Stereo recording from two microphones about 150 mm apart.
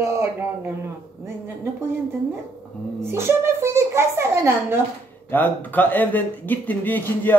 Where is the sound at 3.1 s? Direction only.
15° right (ahead or behind).